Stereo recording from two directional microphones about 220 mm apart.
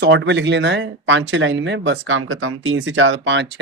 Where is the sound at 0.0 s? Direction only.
50° right (ahead or behind).